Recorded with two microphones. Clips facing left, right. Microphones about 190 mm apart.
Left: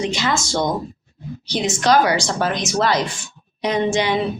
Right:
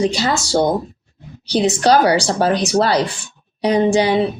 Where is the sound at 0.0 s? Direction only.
35° right (ahead or behind).